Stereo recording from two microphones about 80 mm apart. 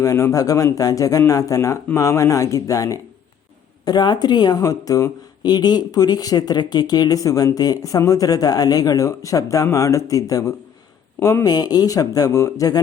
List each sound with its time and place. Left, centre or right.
0.0 s speech: left
3.8 s a woman's voice: left
5.4 s speech: left